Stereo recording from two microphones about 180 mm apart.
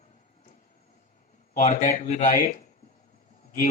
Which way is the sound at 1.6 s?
45° left (ahead or behind).